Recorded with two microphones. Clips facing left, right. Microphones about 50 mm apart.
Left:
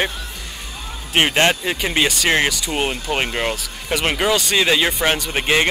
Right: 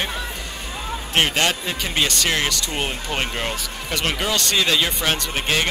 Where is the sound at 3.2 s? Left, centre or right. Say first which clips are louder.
Left 3 dB; left.